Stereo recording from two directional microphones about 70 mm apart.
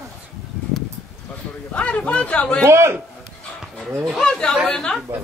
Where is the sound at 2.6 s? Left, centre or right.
Right.